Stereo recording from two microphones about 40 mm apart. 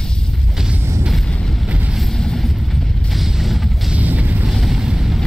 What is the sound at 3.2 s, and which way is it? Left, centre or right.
Vehicle, centre.